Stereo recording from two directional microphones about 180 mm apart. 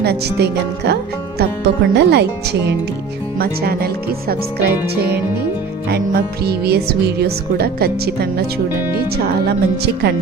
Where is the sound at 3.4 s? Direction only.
60° right (ahead or behind).